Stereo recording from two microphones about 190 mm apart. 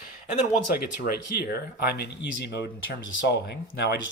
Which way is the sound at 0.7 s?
55° left (ahead or behind).